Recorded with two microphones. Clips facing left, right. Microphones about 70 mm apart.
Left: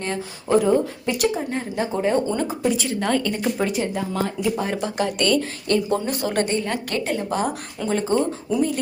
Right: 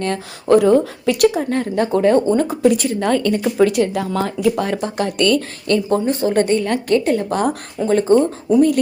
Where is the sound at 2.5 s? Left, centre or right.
Right.